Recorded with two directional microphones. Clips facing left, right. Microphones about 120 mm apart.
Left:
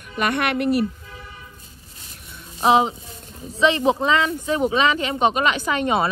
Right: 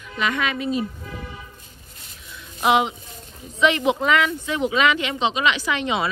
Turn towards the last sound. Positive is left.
turn(degrees=45)  # may be behind; listen again after turning